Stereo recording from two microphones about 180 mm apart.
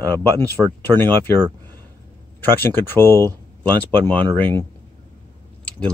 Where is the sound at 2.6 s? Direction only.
10° left (ahead or behind).